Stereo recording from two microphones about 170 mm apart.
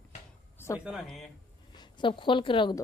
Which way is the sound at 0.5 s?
15° left (ahead or behind).